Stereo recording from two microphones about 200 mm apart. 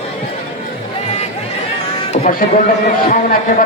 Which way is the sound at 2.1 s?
45° left (ahead or behind).